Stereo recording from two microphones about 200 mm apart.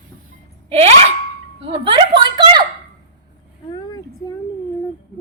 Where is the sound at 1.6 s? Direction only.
25° right (ahead or behind).